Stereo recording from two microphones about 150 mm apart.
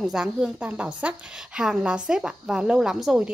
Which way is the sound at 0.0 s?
5° right (ahead or behind).